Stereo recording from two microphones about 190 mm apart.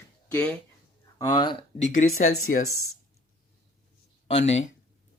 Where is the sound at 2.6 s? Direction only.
90° left.